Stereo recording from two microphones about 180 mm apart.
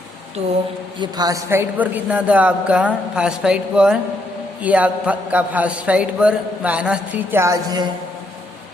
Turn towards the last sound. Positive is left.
turn(degrees=-20)  # may be behind; listen again after turning